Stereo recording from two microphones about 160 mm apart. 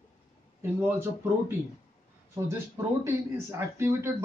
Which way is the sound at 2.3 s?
15° right (ahead or behind).